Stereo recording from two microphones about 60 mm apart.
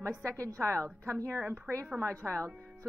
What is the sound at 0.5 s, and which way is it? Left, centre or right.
Speech, right.